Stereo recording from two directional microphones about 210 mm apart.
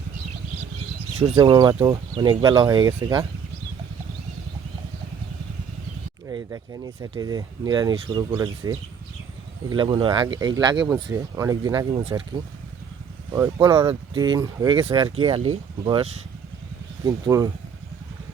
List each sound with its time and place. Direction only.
1.2 s speech: 20° right (ahead or behind)
6.2 s speech: 15° right (ahead or behind)
13.3 s speech: 15° right (ahead or behind)
15.2 s speech: 30° right (ahead or behind)